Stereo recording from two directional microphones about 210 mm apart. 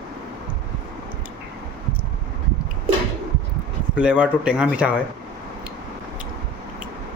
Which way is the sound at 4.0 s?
5° right (ahead or behind).